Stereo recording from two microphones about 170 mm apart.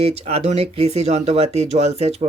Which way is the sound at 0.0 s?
35° right (ahead or behind).